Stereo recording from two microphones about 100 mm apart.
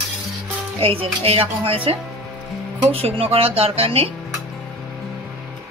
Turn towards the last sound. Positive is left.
turn(degrees=-75)  # may be behind; listen again after turning